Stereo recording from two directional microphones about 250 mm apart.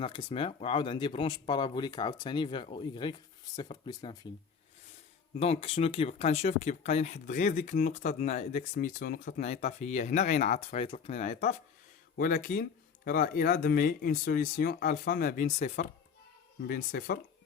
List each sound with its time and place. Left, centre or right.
0.0 s speech: centre
5.4 s speech: left